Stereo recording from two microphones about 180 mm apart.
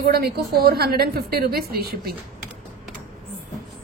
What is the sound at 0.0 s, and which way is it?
A woman's voice, 55° right (ahead or behind).